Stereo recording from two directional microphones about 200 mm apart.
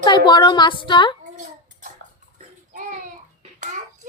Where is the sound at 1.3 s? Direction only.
40° right (ahead or behind).